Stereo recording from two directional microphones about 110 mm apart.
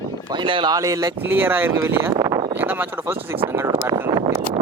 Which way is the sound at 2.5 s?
20° right (ahead or behind).